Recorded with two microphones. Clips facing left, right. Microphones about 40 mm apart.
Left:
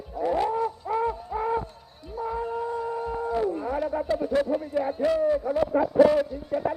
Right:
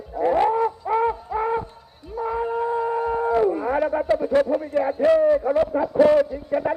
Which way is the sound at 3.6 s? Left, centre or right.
Right.